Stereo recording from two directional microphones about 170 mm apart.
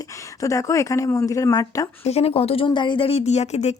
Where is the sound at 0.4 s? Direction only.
20° left (ahead or behind).